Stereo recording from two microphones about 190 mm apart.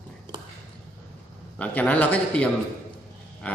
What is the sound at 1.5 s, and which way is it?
Speech, 5° left (ahead or behind).